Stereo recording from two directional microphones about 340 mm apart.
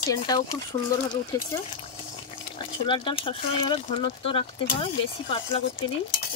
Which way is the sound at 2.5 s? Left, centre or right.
Centre.